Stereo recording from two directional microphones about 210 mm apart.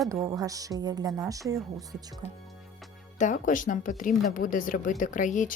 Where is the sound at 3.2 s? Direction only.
35° left (ahead or behind).